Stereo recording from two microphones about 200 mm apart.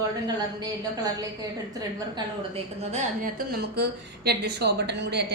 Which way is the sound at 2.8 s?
35° right (ahead or behind).